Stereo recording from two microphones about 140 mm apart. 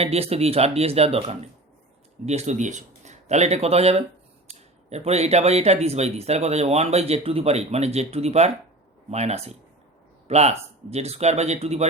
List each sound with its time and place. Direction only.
0.0 s speech: 45° right (ahead or behind)